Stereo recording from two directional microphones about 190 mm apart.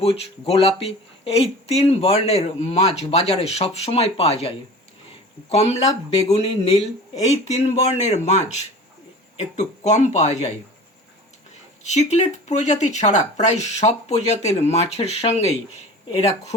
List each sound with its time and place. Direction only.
0.0 s speech: 30° left (ahead or behind)
11.8 s speech: 35° left (ahead or behind)